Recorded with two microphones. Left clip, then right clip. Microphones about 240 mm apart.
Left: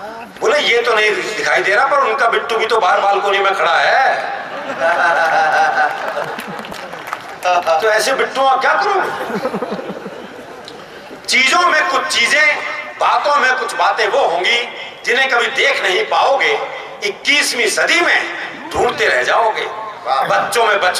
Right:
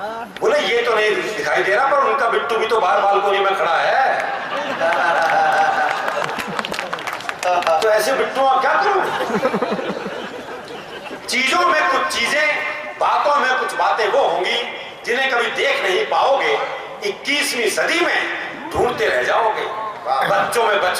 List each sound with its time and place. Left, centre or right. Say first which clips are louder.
0.4 s a man's voice: left 3 dB; centre
1.8 s speech: left 3 dB; centre
2.0 s a man's voice: left 3 dB; centre
5.0 s a sound: left 2 dB; centre
7.4 s a man's voice: left 3 dB; centre
9.0 s a sound: even; centre
11.3 s a man's voice: left 4 dB; centre